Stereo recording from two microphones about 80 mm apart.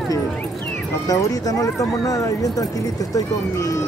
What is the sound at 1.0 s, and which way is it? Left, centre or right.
Speech, left.